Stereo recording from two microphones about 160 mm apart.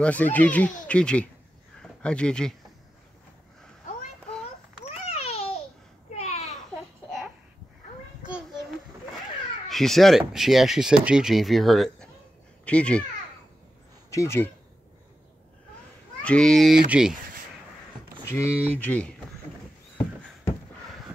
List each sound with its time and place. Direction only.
0.0 s speech: 10° left (ahead or behind)
4.8 s babbling: 40° left (ahead or behind)
6.0 s a sound: 45° left (ahead or behind)
9.7 s speech: centre (ahead or behind)
14.1 s speech: 15° left (ahead or behind)
16.2 s speech: 5° left (ahead or behind)
18.1 s a sound: 15° left (ahead or behind)
18.7 s speech: 10° left (ahead or behind)